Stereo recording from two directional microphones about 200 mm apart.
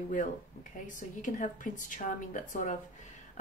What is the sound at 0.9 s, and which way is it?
A woman's voice, 40° left (ahead or behind).